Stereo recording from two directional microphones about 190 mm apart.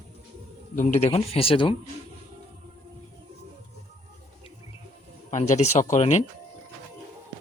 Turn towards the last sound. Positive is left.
turn(degrees=35)  # may be behind; listen again after turning